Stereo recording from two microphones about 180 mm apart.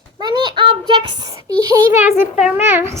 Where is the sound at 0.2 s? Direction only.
25° right (ahead or behind).